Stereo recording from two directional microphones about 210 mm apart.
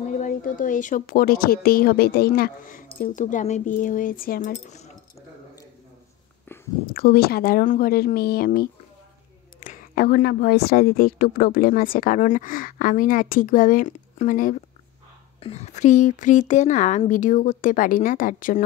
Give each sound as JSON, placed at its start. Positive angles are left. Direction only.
{"t": 0.2, "sound": "a woman's voice", "side_deg": 40}
{"t": 6.9, "sound": "a woman's voice", "side_deg": 45}